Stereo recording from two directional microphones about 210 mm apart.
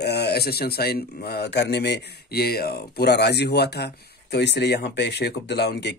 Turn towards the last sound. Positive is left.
turn(degrees=50)  # may be behind; listen again after turning